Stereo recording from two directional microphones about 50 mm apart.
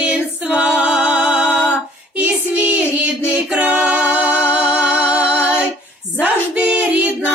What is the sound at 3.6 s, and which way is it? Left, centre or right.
Music, right.